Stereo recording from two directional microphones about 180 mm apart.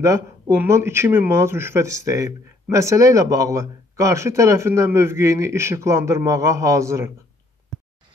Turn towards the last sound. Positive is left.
turn(degrees=-15)  # may be behind; listen again after turning